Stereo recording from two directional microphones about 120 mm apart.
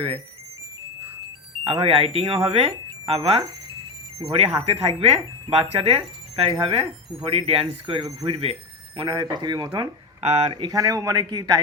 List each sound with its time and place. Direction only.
1.6 s speech: 50° right (ahead or behind)
9.0 s a man's voice: 40° right (ahead or behind)
10.2 s speech: 65° right (ahead or behind)
10.5 s a man's voice: 35° right (ahead or behind)